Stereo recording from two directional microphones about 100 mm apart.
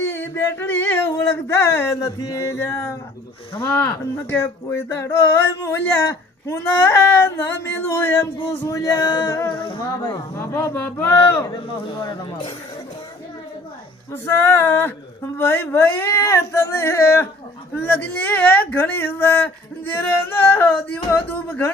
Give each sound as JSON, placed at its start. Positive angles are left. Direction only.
{"t": 0.0, "sound": "speech", "side_deg": 25}
{"t": 9.3, "sound": "speech", "side_deg": 25}
{"t": 9.6, "sound": "speech", "side_deg": 55}
{"t": 10.3, "sound": "speech", "side_deg": 30}
{"t": 11.9, "sound": "speech", "side_deg": 55}
{"t": 14.1, "sound": "speech", "side_deg": 25}